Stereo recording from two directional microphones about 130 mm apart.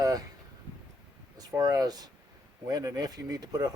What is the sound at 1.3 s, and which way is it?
Speech, 30° right (ahead or behind).